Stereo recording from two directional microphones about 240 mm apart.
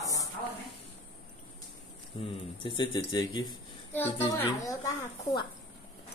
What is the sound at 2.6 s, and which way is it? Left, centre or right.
Speech, centre.